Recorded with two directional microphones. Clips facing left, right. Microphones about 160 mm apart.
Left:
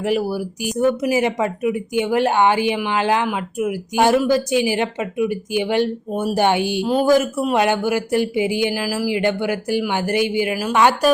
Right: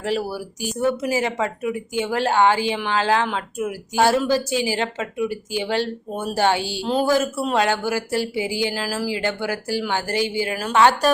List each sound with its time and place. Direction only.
0.0 s speech: 15° left (ahead or behind)